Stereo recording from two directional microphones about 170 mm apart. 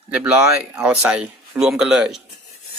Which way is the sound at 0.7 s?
5° right (ahead or behind).